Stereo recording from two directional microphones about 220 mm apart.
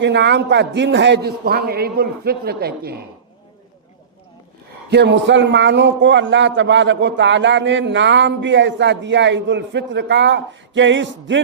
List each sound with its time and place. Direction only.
0.0 s a man's voice: 55° right (ahead or behind)
4.9 s a man's voice: 50° right (ahead or behind)